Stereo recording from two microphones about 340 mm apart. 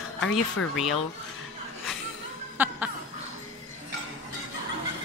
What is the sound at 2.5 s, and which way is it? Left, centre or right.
Laughter, centre.